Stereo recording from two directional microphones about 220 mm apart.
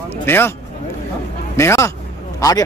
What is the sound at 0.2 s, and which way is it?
Speech, 10° left (ahead or behind).